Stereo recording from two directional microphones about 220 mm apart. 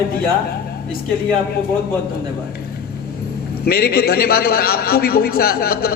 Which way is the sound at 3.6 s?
45° left (ahead or behind).